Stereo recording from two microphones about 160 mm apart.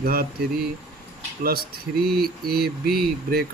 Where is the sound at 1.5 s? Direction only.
70° right (ahead or behind).